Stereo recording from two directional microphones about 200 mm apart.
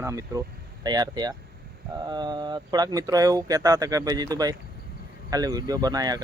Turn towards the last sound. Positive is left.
turn(degrees=-20)  # may be behind; listen again after turning